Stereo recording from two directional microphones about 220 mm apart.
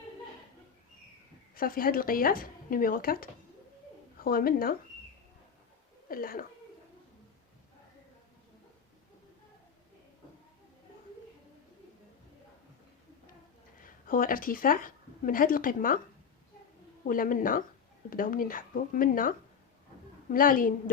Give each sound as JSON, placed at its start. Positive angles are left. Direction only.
{"t": 1.5, "sound": "speech", "side_deg": 40}
{"t": 6.1, "sound": "a sound", "side_deg": 40}
{"t": 13.8, "sound": "speech", "side_deg": 40}
{"t": 17.1, "sound": "speech", "side_deg": 40}
{"t": 20.3, "sound": "speech", "side_deg": 40}